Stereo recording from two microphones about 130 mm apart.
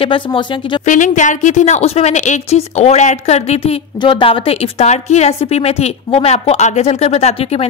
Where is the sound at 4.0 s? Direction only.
40° left (ahead or behind).